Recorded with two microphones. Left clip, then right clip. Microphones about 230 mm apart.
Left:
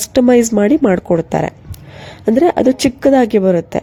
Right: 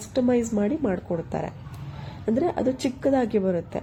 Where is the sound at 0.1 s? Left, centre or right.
Left.